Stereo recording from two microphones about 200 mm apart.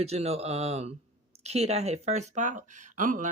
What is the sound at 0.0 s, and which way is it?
Speech, 30° right (ahead or behind).